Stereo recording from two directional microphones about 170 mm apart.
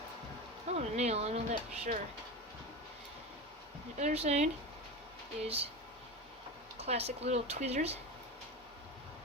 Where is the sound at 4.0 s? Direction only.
40° right (ahead or behind).